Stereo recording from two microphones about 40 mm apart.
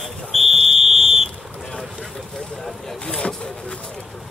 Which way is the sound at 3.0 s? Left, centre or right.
Left.